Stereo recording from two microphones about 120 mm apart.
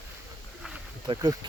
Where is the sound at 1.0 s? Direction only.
35° right (ahead or behind).